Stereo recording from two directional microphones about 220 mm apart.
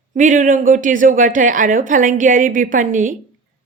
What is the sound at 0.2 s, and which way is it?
A woman's voice, 35° right (ahead or behind).